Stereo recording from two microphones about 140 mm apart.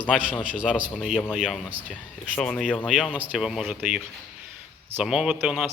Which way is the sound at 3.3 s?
5° right (ahead or behind).